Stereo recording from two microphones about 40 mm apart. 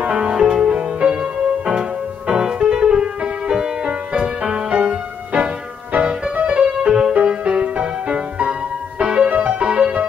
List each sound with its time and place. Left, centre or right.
0.2 s music: right